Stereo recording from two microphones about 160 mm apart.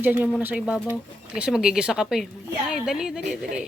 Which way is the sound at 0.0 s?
10° right (ahead or behind).